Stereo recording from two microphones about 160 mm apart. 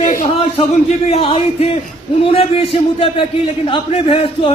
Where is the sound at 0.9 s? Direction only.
40° left (ahead or behind).